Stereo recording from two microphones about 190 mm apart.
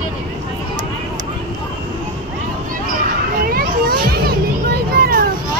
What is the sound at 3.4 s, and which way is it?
Music, 50° right (ahead or behind).